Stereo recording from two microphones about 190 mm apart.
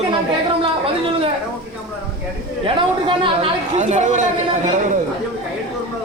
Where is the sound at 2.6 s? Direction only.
25° right (ahead or behind).